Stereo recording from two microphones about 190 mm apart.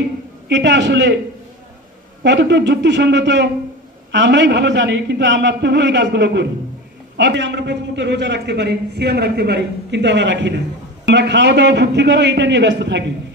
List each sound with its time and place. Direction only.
0.5 s a man's voice: 70° right (ahead or behind)
2.2 s a man's voice: 65° right (ahead or behind)